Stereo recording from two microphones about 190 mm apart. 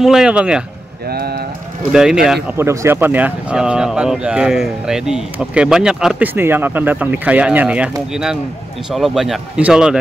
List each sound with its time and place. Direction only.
0.0 s speech: 5° right (ahead or behind)
1.1 s speech: 55° right (ahead or behind)
1.9 s speech: 5° right (ahead or behind)
2.5 s speech: 15° right (ahead or behind)